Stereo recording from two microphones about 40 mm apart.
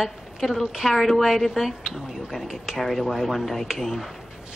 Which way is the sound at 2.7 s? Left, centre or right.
Centre.